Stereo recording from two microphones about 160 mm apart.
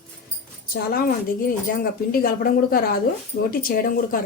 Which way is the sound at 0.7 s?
65° left (ahead or behind).